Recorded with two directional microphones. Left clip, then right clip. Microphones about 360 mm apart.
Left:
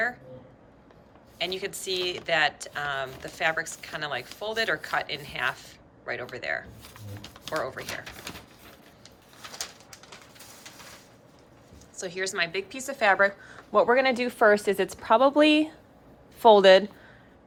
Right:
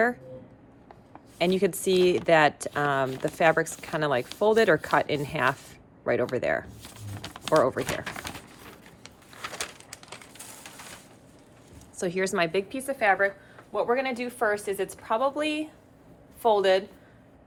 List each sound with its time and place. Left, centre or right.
1.4 s speech: centre
6.8 s a sound: centre
9.6 s bird: centre
11.9 s a woman's voice: centre
13.7 s a woman's voice: left